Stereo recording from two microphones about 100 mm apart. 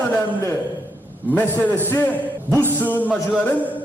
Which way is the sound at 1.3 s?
20° left (ahead or behind).